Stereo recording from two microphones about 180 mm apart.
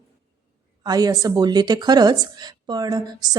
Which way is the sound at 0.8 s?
20° right (ahead or behind).